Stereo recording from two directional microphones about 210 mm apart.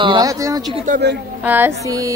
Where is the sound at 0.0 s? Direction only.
20° right (ahead or behind).